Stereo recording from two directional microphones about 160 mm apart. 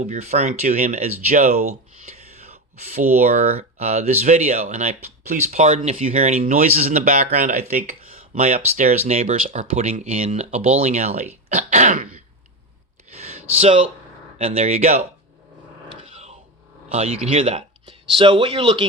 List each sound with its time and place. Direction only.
0.0 s speech: 45° right (ahead or behind)
2.9 s speech: 45° right (ahead or behind)
6.4 s speech: 60° right (ahead or behind)
6.7 s speech: 45° right (ahead or behind)
7.1 s speech: 55° right (ahead or behind)
13.1 s a sound: 40° right (ahead or behind)
14.3 s speech: 40° right (ahead or behind)
15.9 s a sound: 35° right (ahead or behind)
16.9 s speech: 40° right (ahead or behind)